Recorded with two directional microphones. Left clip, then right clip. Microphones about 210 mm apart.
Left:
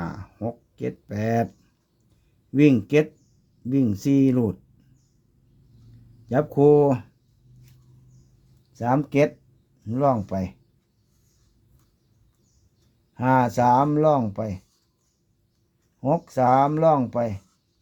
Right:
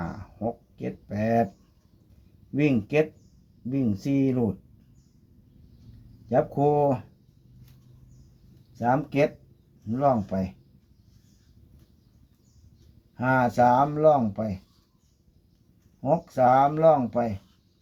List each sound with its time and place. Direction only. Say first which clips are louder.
0.0 s a sound: even; 55° left (ahead or behind)
2.5 s speech: left 6 dB; 55° left (ahead or behind)
6.2 s speech: left 4 dB; 55° left (ahead or behind)
8.7 s speech: left 2 dB; 55° left (ahead or behind)
13.1 s speech: left 2 dB; 55° left (ahead or behind)
16.0 s speech: even; 55° left (ahead or behind)